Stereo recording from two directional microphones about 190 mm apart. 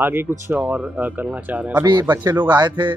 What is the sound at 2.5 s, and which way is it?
Speech, 25° right (ahead or behind).